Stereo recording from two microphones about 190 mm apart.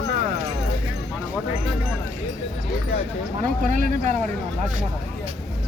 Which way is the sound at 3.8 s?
45° right (ahead or behind).